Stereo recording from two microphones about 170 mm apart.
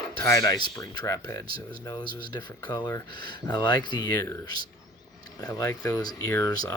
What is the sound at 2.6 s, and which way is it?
Speech, 25° left (ahead or behind).